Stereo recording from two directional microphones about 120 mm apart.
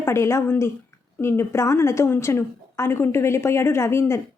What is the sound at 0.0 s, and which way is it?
Speech, 25° left (ahead or behind).